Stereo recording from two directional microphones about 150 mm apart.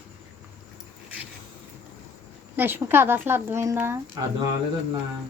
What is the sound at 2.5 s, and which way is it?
Speech, 15° right (ahead or behind).